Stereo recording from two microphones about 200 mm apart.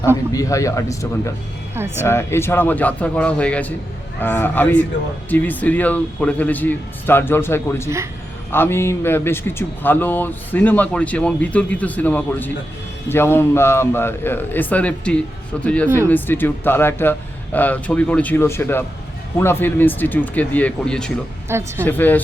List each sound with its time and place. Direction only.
0.3 s speech: 15° left (ahead or behind)
1.7 s speech: 10° right (ahead or behind)
2.0 s speech: 10° left (ahead or behind)
21.5 s speech: 15° right (ahead or behind)
21.8 s speech: 10° left (ahead or behind)